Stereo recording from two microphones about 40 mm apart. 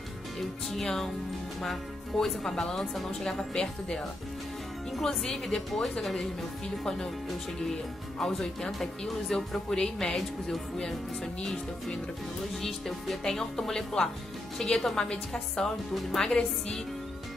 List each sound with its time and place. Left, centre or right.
0.4 s speech: centre
3.5 s a woman's voice: left
5.0 s speech: centre
8.2 s speech: centre
12.6 s speech: centre
16.3 s speech: centre